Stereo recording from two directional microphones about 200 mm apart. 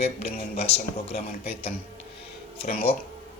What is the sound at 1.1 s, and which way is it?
Speech, 50° left (ahead or behind).